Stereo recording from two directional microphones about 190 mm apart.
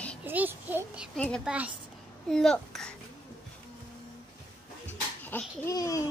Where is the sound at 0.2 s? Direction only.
10° right (ahead or behind).